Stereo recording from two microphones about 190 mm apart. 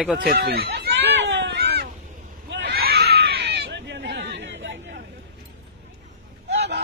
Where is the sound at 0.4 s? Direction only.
60° right (ahead or behind).